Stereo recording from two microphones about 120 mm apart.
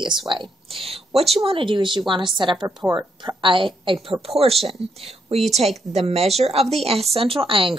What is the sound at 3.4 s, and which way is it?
A woman's voice, 45° right (ahead or behind).